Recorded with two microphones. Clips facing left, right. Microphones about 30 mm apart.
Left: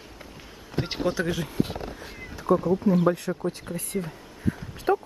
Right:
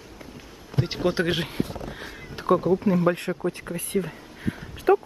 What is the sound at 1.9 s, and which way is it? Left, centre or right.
Cat, right.